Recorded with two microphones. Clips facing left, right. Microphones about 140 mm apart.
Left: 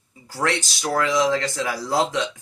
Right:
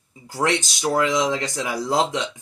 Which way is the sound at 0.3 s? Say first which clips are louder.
Right 2 dB; 20° right (ahead or behind).